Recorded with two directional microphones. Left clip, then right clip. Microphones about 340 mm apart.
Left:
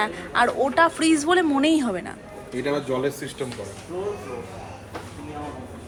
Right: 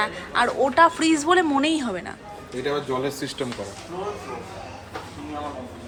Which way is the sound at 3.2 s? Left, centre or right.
Right.